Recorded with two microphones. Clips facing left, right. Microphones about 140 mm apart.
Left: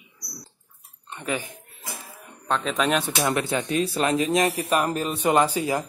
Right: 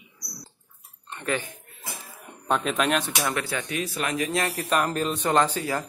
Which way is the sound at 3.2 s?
15° left (ahead or behind).